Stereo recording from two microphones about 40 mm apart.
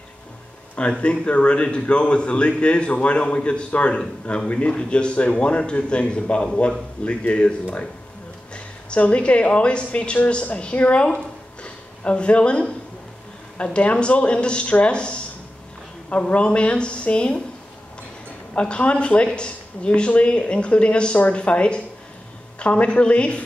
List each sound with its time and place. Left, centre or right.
0.7 s a woman's voice: left
18.5 s speech: left